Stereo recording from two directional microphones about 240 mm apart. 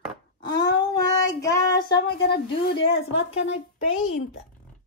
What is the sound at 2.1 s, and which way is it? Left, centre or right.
Speech, left.